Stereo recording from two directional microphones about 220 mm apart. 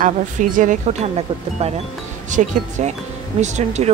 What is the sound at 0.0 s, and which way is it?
Speech, 35° right (ahead or behind).